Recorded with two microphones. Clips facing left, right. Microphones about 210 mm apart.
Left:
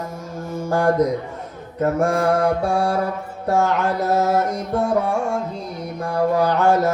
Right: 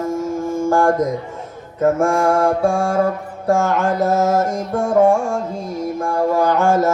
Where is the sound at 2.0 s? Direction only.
45° right (ahead or behind).